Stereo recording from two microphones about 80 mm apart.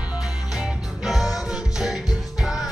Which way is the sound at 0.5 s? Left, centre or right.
Centre.